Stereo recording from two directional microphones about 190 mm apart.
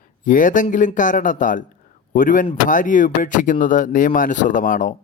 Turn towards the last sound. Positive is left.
turn(degrees=45)  # may be behind; listen again after turning